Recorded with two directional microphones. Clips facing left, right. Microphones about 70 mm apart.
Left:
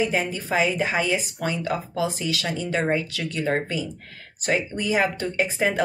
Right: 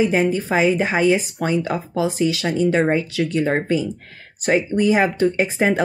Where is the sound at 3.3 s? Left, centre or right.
Right.